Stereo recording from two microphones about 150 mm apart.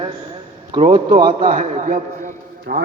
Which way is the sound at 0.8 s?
55° right (ahead or behind).